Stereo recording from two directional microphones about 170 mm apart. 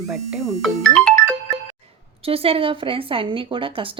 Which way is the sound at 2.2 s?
35° right (ahead or behind).